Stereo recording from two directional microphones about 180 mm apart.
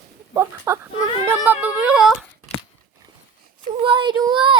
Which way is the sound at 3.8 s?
25° right (ahead or behind).